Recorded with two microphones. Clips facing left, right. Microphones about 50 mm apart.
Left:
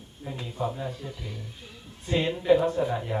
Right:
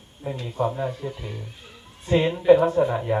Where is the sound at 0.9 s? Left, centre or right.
Right.